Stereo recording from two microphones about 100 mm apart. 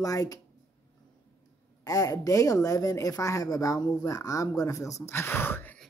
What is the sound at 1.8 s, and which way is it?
Speech, 35° left (ahead or behind).